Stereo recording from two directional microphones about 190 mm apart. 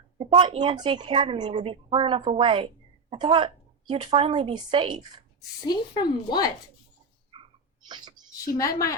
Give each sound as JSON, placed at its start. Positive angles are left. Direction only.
{"t": 0.2, "sound": "a woman's voice", "side_deg": -25}
{"t": 5.6, "sound": "speech", "side_deg": 20}
{"t": 7.9, "sound": "speech", "side_deg": -25}
{"t": 8.5, "sound": "a woman's voice", "side_deg": 20}